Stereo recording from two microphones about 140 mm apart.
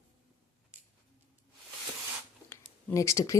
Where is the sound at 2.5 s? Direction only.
20° left (ahead or behind).